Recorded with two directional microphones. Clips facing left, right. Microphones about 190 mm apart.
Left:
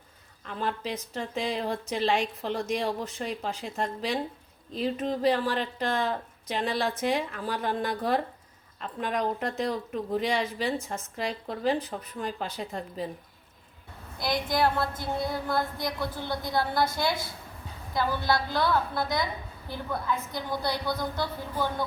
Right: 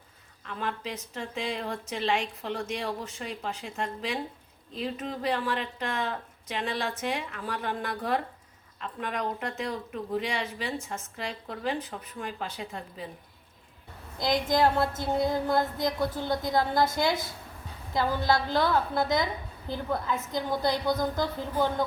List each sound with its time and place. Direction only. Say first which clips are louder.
0.4 s a woman's voice: left 2 dB; 35° left (ahead or behind)
14.2 s a woman's voice: right 2 dB; 20° right (ahead or behind)